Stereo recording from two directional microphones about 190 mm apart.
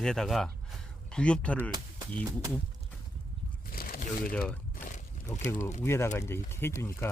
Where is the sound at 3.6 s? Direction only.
50° left (ahead or behind).